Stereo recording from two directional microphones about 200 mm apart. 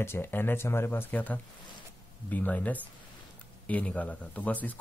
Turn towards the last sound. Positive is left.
turn(degrees=10)  # may be behind; listen again after turning